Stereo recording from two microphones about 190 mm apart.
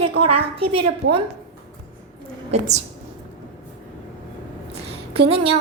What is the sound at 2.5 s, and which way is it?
Speech, 35° right (ahead or behind).